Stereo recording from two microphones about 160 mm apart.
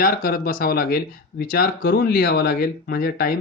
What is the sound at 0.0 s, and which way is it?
Speech, 65° left (ahead or behind).